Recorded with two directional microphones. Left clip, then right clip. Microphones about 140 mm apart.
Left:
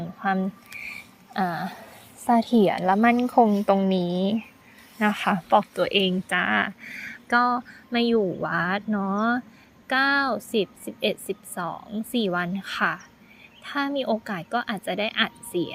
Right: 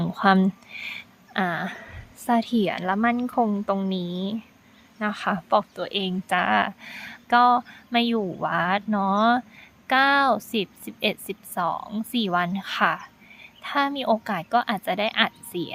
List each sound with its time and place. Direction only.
0.2 s speech: 40° right (ahead or behind)
1.3 s speech: 10° right (ahead or behind)
2.2 s a woman's voice: centre (ahead or behind)
3.8 s speech: 20° left (ahead or behind)
5.7 s speech: 20° left (ahead or behind)
6.2 s a woman's voice: 5° right (ahead or behind)